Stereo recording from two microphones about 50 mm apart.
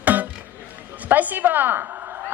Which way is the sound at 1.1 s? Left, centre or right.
Right.